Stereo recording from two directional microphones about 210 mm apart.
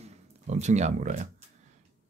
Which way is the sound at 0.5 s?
35° right (ahead or behind).